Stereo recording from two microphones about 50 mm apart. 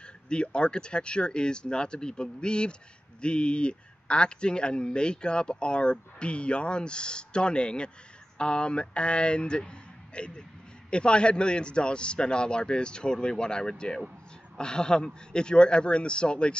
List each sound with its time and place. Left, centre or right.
0.0 s a man's voice: centre